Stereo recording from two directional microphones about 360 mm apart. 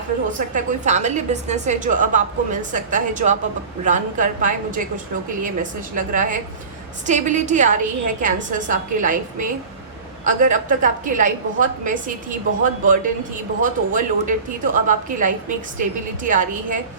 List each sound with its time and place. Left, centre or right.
0.3 s speech: right
5.9 s speech: right